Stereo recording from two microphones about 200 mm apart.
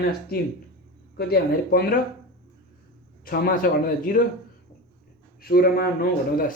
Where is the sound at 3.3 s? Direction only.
45° left (ahead or behind).